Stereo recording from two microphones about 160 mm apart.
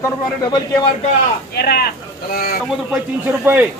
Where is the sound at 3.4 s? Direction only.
10° right (ahead or behind).